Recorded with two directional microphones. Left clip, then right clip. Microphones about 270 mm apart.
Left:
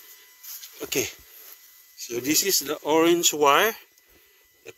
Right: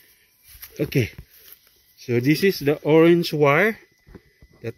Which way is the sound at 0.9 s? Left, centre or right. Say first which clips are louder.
Left 3 dB; centre.